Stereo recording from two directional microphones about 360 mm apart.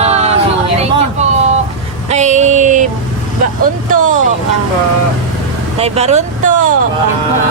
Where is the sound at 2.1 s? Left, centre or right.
Centre.